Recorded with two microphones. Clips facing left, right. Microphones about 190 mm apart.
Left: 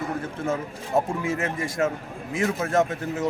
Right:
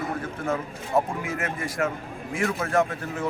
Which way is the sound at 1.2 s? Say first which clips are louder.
Left 3 dB; 25° left (ahead or behind).